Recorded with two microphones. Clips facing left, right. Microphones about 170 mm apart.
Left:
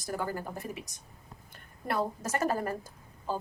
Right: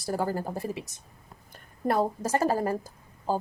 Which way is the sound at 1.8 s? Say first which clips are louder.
Right 6 dB; 40° right (ahead or behind).